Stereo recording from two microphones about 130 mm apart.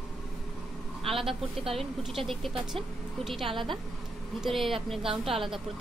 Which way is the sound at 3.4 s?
40° right (ahead or behind).